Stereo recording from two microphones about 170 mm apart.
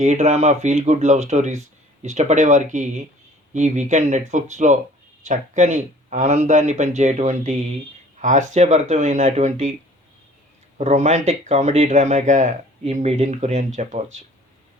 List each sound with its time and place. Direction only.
0.0 s speech: 45° right (ahead or behind)
10.8 s speech: 40° right (ahead or behind)